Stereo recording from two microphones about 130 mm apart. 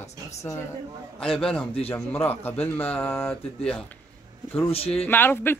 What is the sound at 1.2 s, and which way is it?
Speech, 5° left (ahead or behind).